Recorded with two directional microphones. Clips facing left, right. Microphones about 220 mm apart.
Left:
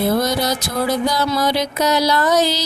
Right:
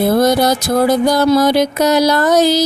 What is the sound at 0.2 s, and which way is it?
Music, 50° right (ahead or behind).